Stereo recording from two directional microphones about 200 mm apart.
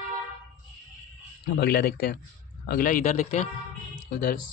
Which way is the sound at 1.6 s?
50° left (ahead or behind).